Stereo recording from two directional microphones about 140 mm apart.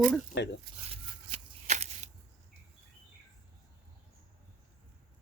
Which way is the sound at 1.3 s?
55° right (ahead or behind).